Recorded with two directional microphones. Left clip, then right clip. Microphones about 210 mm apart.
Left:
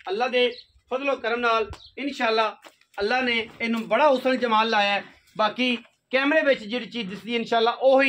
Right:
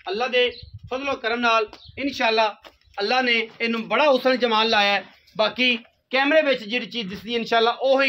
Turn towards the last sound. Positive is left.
turn(degrees=-40)  # may be behind; listen again after turning